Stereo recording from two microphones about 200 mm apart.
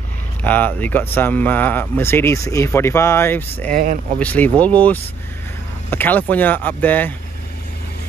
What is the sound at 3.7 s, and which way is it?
Speech, 40° right (ahead or behind).